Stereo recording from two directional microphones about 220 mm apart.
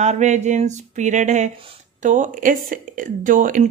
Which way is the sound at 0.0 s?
30° right (ahead or behind).